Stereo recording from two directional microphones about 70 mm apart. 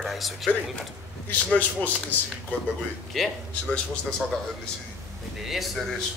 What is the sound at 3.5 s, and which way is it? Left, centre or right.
Speech, centre.